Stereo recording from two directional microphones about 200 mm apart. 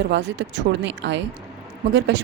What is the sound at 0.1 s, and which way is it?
Speech, 60° right (ahead or behind).